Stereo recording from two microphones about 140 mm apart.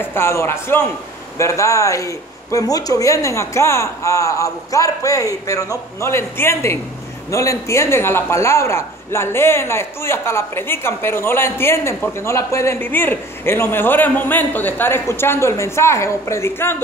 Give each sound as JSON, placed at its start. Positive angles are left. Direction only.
{"t": 0.0, "sound": "a man's voice", "side_deg": 15}